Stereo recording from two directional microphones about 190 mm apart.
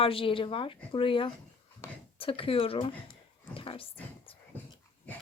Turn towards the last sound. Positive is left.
turn(degrees=30)  # may be behind; listen again after turning